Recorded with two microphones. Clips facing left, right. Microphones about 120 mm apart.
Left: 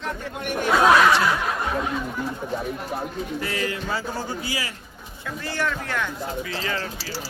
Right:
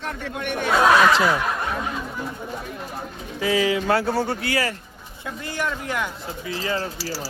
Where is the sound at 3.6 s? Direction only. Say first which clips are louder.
Right 7 dB; 70° right (ahead or behind).